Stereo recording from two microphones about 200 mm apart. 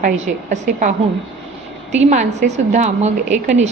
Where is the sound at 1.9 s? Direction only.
35° right (ahead or behind).